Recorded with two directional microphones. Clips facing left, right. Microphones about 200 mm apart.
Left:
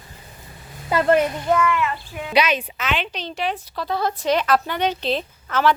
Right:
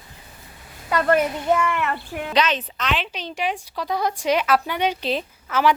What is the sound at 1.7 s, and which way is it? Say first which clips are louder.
Speech: left 1 dB; 60° right (ahead or behind).